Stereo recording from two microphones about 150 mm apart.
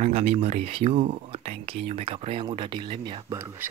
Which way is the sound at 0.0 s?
45° right (ahead or behind).